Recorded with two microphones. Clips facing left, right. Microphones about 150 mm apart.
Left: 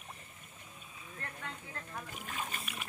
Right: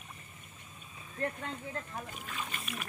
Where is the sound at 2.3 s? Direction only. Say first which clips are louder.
Even; 45° left (ahead or behind).